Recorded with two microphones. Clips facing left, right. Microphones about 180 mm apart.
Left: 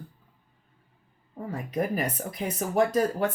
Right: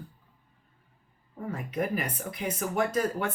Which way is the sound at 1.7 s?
40° left (ahead or behind).